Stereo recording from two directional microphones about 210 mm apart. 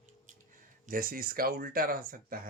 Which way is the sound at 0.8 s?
40° right (ahead or behind).